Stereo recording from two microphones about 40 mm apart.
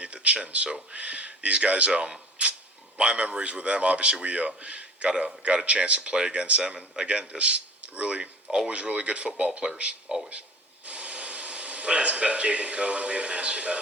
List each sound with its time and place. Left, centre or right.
0.0 s a sound: right
0.3 s a man's voice: right
10.1 s speech: right
10.8 s speech: right